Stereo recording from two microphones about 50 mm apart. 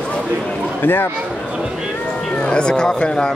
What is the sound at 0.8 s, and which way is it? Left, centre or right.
Speech, left.